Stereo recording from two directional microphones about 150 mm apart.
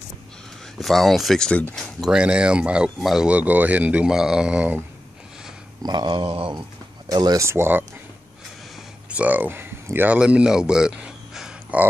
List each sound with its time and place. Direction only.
0.7 s speech: centre (ahead or behind)
2.0 s speech: 5° right (ahead or behind)
5.8 s a sound: 30° right (ahead or behind)
7.1 s speech: 25° right (ahead or behind)
9.1 s speech: 10° right (ahead or behind)